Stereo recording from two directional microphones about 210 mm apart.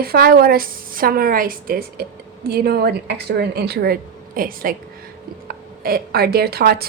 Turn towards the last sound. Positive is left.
turn(degrees=-45)  # may be behind; listen again after turning